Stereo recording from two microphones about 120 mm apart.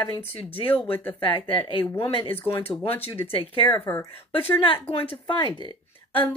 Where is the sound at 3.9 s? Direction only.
20° left (ahead or behind).